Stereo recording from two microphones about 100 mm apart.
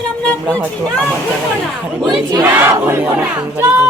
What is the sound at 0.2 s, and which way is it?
Speech, 10° left (ahead or behind).